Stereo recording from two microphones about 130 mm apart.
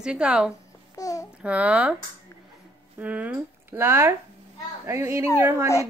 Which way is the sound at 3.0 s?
10° right (ahead or behind).